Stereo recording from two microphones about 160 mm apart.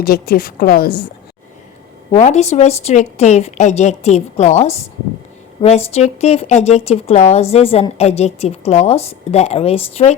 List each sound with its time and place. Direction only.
0.0 s a woman's voice: 75° left (ahead or behind)
2.1 s a woman's voice: 45° left (ahead or behind)